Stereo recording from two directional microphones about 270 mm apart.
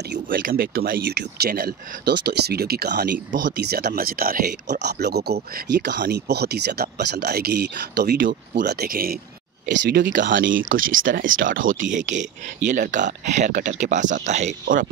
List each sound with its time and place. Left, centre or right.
0.1 s speech: right